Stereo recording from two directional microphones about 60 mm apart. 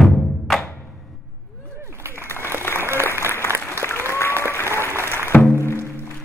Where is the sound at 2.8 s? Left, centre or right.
Right.